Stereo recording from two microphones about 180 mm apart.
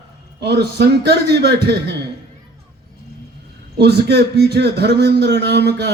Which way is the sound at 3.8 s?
65° right (ahead or behind).